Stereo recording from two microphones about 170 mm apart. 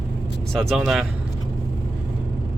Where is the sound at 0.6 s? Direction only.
Centre (ahead or behind).